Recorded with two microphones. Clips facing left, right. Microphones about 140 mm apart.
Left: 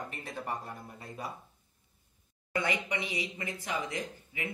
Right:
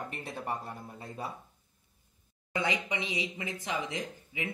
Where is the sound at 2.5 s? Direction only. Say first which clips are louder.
Even; 20° right (ahead or behind).